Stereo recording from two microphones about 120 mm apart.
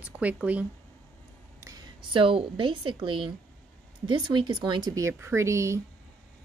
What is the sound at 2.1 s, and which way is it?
A woman's voice, 45° right (ahead or behind).